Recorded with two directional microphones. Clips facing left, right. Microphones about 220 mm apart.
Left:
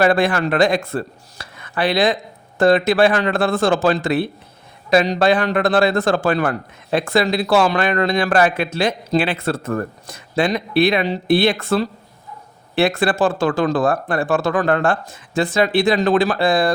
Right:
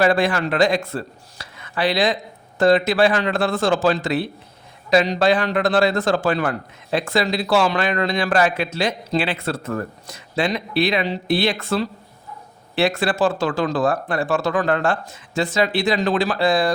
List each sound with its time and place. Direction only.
0.0 s a man's voice: 55° left (ahead or behind)